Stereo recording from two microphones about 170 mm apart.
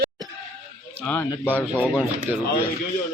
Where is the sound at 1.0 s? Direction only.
10° left (ahead or behind).